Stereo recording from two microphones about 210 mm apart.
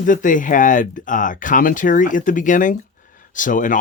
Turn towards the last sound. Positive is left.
turn(degrees=40)  # may be behind; listen again after turning